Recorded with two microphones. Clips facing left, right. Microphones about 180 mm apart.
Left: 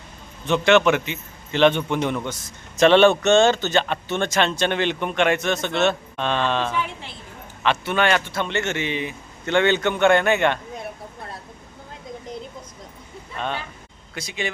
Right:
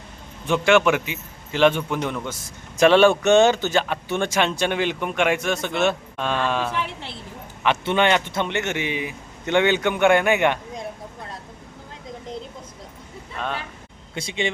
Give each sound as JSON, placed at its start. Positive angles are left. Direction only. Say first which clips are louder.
{"t": 0.4, "sound": "a man's voice", "louder": "left 1 dB", "side_deg": -10}
{"t": 7.6, "sound": "a man's voice", "louder": "right 1 dB", "side_deg": -20}
{"t": 14.2, "sound": "speech", "louder": "right 3 dB", "side_deg": -25}